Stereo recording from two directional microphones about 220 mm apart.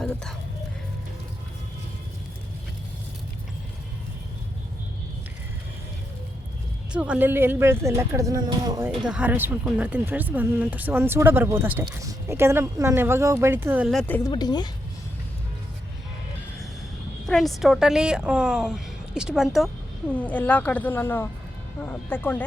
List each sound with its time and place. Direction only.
6.9 s speech: 5° right (ahead or behind)
8.9 s speech: 5° right (ahead or behind)
13.8 s a woman's voice: centre (ahead or behind)
14.3 s speech: 20° left (ahead or behind)
17.2 s a woman's voice: centre (ahead or behind)